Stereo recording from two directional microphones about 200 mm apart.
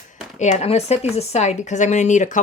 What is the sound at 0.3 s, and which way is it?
A woman's voice, 35° left (ahead or behind).